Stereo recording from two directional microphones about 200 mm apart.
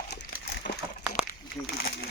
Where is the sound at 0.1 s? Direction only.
60° left (ahead or behind).